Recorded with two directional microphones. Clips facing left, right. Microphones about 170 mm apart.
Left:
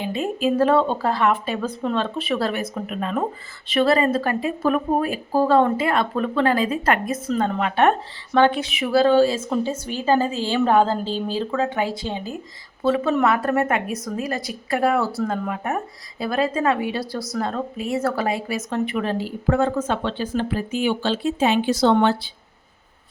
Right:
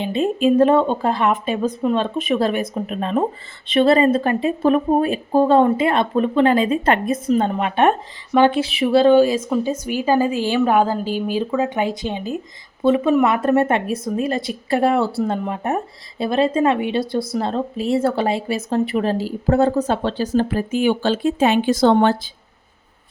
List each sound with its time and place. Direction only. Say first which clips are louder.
0.0 s a woman's voice: right 5 dB; 20° right (ahead or behind)
8.6 s a woman's voice: right 4 dB; 30° right (ahead or behind)